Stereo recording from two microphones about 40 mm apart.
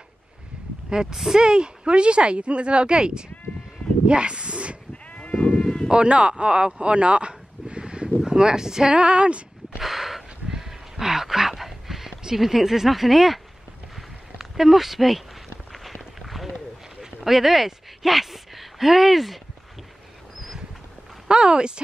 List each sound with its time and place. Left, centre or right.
0.8 s speech: centre
5.6 s a sound: centre
5.9 s speech: right
9.0 s speech: right
9.8 s a sound: centre
12.4 s speech: centre
14.4 s speech: centre
16.2 s a sound: centre
21.3 s speech: right